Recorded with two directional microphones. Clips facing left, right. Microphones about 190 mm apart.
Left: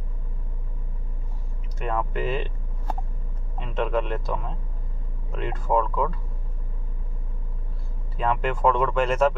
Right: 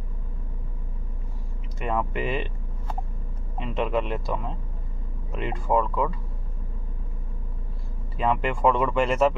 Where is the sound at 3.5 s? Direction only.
10° right (ahead or behind).